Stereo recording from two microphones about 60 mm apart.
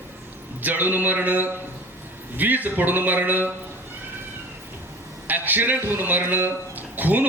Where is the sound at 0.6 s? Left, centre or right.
Right.